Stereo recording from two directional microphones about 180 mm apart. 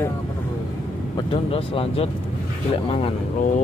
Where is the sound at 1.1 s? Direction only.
30° left (ahead or behind).